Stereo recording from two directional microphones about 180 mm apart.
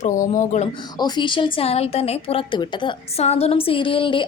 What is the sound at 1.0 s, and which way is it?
A woman's voice, 25° left (ahead or behind).